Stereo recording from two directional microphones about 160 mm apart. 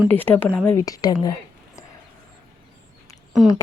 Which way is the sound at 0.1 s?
10° left (ahead or behind).